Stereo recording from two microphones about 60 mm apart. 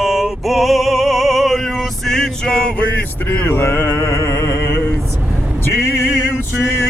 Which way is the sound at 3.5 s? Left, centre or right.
Left.